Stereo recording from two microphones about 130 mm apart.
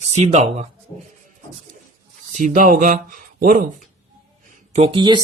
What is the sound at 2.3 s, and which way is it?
Speech, 80° right.